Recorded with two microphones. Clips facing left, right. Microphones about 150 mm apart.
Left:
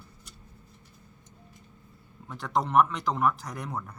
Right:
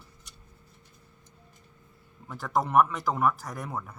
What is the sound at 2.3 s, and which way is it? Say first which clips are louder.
Speech: right 1 dB; 5° right (ahead or behind).